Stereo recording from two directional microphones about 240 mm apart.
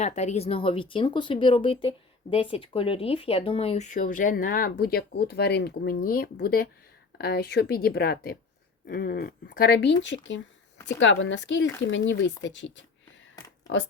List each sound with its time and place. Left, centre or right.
0.0 s a woman's voice: left